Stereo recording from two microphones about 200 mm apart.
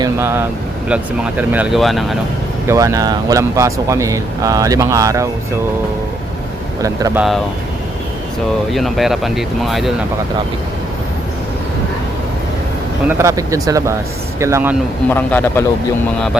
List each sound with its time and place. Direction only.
0.0 s speech: 15° right (ahead or behind)
2.6 s speech: 15° right (ahead or behind)
6.8 s speech: 15° right (ahead or behind)
7.2 s speech: centre (ahead or behind)
8.7 s speech: centre (ahead or behind)
13.1 s speech: 15° right (ahead or behind)
15.1 s a man's voice: 10° left (ahead or behind)